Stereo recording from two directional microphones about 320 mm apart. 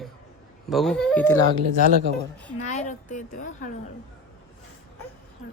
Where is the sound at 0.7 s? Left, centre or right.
Centre.